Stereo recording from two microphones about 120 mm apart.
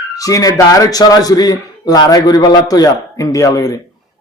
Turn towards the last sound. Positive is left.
turn(degrees=30)  # may be behind; listen again after turning